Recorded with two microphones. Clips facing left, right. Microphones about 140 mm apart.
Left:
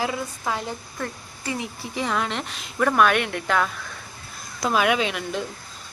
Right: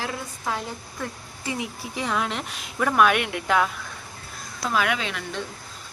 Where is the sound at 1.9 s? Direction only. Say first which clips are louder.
Left 1 dB; centre (ahead or behind).